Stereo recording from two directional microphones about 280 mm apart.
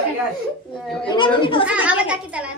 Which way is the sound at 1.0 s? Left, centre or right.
Centre.